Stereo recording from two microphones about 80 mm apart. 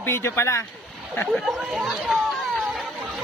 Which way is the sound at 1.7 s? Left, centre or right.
Centre.